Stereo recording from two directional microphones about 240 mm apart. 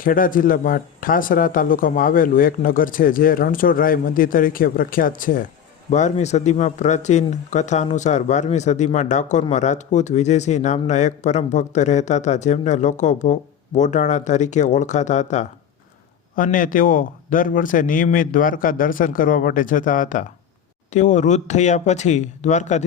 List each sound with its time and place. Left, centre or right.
0.0 s speech: left